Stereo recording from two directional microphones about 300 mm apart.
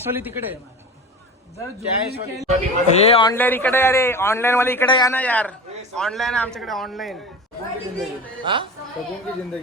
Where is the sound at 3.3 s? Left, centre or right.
Centre.